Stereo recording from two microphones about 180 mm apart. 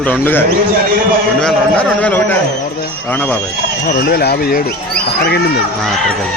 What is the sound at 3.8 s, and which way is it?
Speech, 60° left (ahead or behind).